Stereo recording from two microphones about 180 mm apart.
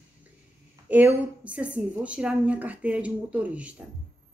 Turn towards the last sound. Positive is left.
turn(degrees=-10)  # may be behind; listen again after turning